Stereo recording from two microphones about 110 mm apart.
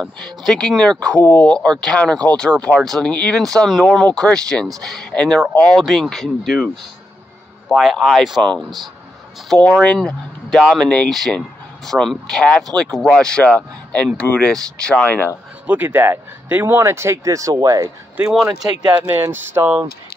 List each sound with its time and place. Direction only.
0.0 s speech: 5° left (ahead or behind)
15.6 s speech: 15° right (ahead or behind); by 17.9 s 35° right (ahead or behind)
18.2 s speech: 10° right (ahead or behind)
18.6 s speech: 35° right (ahead or behind)
19.0 s speech: 20° right (ahead or behind)